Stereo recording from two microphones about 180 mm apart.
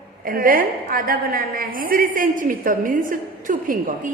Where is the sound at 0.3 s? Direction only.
50° right (ahead or behind).